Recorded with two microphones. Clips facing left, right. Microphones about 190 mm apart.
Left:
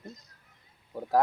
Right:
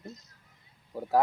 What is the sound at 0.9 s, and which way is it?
Speech, centre (ahead or behind).